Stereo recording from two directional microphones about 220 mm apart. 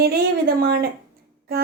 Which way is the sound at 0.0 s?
45° right (ahead or behind).